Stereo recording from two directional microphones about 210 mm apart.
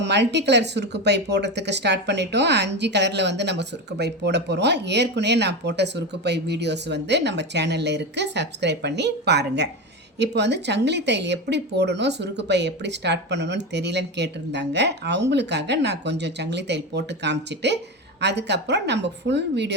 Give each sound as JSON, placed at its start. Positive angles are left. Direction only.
{"t": 0.0, "sound": "speech", "side_deg": -55}